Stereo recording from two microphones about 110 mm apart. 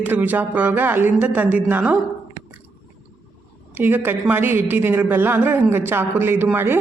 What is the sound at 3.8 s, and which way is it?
A woman's voice, 20° right (ahead or behind).